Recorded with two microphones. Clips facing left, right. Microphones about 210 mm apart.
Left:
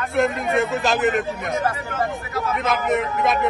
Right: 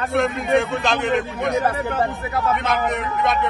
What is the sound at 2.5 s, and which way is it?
Speech, centre (ahead or behind).